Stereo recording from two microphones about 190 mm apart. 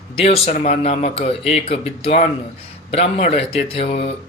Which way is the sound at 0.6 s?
35° left (ahead or behind).